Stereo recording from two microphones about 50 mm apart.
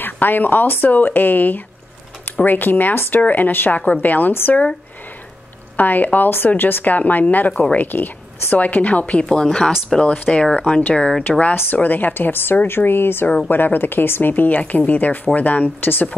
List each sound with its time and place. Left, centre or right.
0.0 s speech: left
4.3 s a woman's voice: left
5.8 s a woman's voice: left; by 9.7 s centre
10.0 s a woman's voice: left
14.6 s speech: left